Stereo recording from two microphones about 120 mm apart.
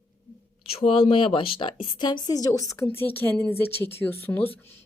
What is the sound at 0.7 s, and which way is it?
A woman's voice, 55° left (ahead or behind).